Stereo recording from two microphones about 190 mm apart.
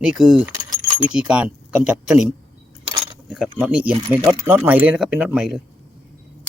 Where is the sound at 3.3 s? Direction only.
5° right (ahead or behind).